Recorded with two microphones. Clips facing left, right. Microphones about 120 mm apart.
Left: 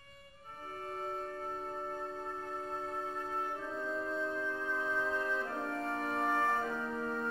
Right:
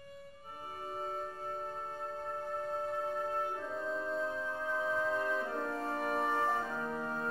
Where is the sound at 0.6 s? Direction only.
10° right (ahead or behind).